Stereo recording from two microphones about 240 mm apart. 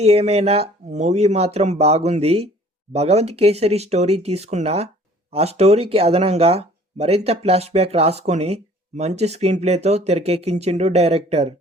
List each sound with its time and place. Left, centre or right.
0.0 s speech: right